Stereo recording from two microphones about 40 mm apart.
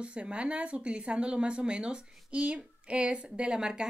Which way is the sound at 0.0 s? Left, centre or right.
Right.